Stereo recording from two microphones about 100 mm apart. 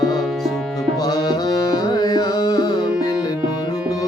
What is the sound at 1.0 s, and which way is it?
Music, 40° left (ahead or behind).